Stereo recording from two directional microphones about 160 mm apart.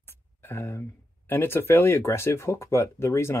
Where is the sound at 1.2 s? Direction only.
15° left (ahead or behind).